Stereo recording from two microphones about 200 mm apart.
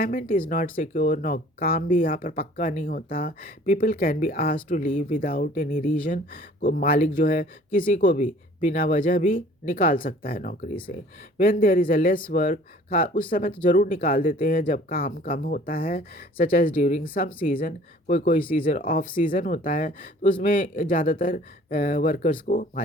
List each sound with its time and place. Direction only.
0.0 s speech: 40° left (ahead or behind)